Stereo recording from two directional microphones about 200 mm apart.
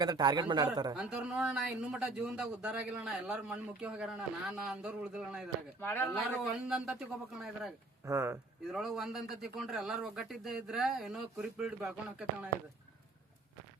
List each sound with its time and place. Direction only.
0.0 s speech: 20° right (ahead or behind)
0.9 s speech: 5° right (ahead or behind)
5.8 s speech: 10° left (ahead or behind)
6.6 s speech: 5° right (ahead or behind)
8.0 s speech: 15° right (ahead or behind)
8.7 s speech: centre (ahead or behind)